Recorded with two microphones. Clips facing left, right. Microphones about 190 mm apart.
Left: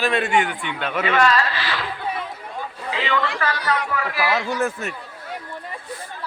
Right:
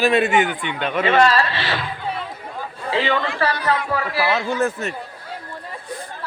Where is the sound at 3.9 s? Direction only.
30° right (ahead or behind).